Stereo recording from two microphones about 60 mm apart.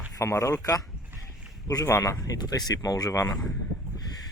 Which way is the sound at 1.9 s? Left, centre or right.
Left.